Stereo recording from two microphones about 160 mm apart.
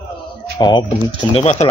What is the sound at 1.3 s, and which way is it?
Speech, 40° left (ahead or behind).